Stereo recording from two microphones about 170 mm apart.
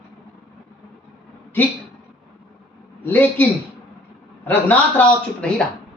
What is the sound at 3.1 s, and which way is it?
Speech, 10° left (ahead or behind).